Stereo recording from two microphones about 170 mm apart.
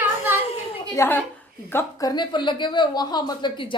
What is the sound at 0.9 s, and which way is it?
A woman's voice, 10° left (ahead or behind).